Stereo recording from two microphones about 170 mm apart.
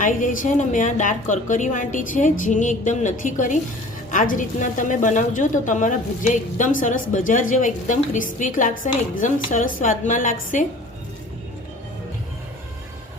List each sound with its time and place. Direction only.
0.0 s a woman's voice: 50° left (ahead or behind)